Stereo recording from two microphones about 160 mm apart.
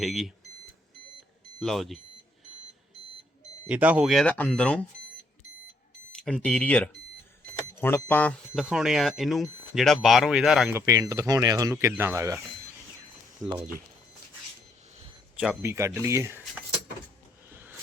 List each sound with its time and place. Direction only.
0.0 s speech: centre (ahead or behind)
1.5 s speech: centre (ahead or behind)
3.7 s speech: 10° right (ahead or behind)
6.1 s speech: 5° left (ahead or behind)
8.6 s speech: 5° right (ahead or behind)
10.7 s speech: 15° right (ahead or behind)
13.4 s speech: 20° right (ahead or behind)
15.6 s speech: 15° right (ahead or behind)
17.5 s a sound: 10° right (ahead or behind)